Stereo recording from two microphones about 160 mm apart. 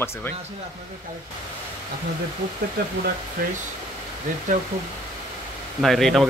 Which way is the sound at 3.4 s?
65° right (ahead or behind).